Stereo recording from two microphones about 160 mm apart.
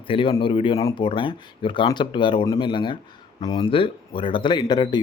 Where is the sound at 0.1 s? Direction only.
30° left (ahead or behind).